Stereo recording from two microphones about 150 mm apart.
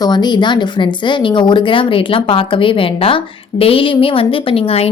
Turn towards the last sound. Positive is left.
turn(degrees=40)  # may be behind; listen again after turning